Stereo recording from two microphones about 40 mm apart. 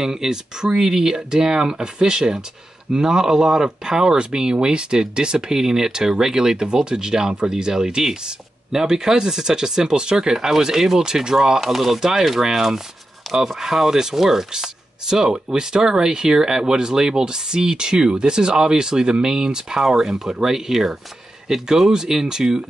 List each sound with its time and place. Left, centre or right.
0.0 s speech: centre